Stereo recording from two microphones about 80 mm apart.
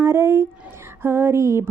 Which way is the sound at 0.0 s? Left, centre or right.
Right.